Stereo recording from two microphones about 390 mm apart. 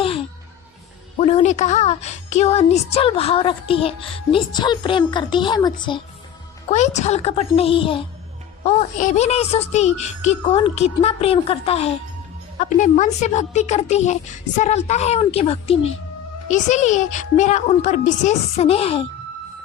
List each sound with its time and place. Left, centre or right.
0.0 s music: centre
1.2 s a woman's voice: centre